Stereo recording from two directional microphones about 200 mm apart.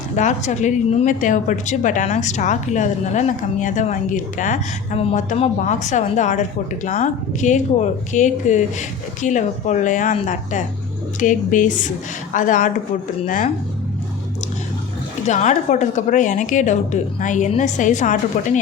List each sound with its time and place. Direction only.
0.2 s speech: 35° left (ahead or behind)
15.3 s speech: 35° left (ahead or behind)